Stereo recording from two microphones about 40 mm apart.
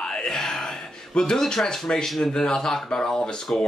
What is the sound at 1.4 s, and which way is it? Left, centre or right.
Speech, centre.